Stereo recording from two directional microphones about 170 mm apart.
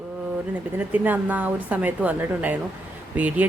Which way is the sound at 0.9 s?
10° right (ahead or behind).